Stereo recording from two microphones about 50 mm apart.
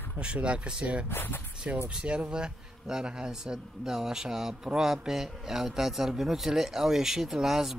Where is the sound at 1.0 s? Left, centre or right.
Left.